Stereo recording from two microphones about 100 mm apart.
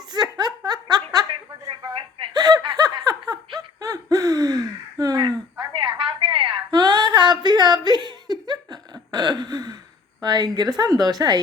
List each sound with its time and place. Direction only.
0.1 s giggle: 45° right (ahead or behind)
2.2 s snicker: 45° right (ahead or behind)
6.7 s a sound: 45° right (ahead or behind)
10.2 s a woman's voice: 45° right (ahead or behind)